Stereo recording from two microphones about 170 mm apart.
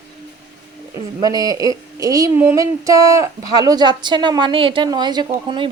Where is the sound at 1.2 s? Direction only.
20° right (ahead or behind).